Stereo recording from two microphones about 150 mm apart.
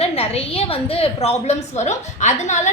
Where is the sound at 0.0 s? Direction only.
40° left (ahead or behind).